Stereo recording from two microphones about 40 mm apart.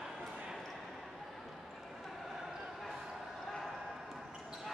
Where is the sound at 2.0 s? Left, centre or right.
Centre.